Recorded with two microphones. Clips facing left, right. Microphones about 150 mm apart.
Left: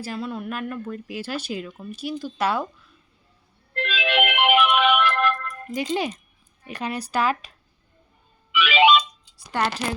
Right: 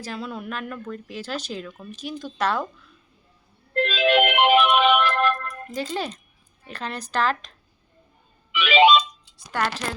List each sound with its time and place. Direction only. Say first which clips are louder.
0.0 s speech: left 2 dB; 5° left (ahead or behind)
3.8 s music: right 5 dB; 40° right (ahead or behind)
5.7 s speech: left 3 dB; 15° left (ahead or behind)
8.5 s a sound: right 1 dB; 40° right (ahead or behind)
9.5 s speech: left 1 dB; 10° left (ahead or behind)